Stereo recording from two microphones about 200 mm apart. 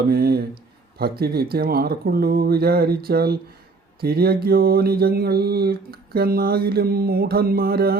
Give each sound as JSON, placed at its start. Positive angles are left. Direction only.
{"t": 0.1, "sound": "mantra", "side_deg": -50}